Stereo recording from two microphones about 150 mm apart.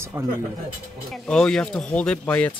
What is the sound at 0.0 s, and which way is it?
Speech, 15° right (ahead or behind).